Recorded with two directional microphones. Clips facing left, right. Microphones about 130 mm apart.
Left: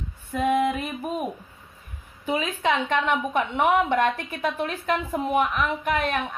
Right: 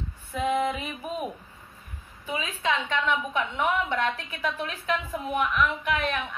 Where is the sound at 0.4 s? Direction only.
50° left (ahead or behind).